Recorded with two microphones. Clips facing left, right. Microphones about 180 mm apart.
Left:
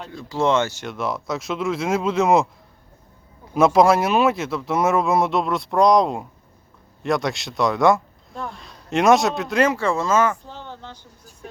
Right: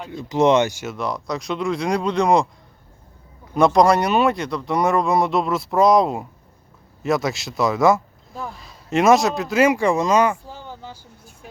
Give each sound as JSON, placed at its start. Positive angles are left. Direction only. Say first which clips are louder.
{"t": 0.1, "sound": "speech", "louder": "right 4 dB", "side_deg": -20}
{"t": 0.9, "sound": "speech", "louder": "left 2 dB", "side_deg": 0}
{"t": 3.5, "sound": "speech", "louder": "even", "side_deg": 5}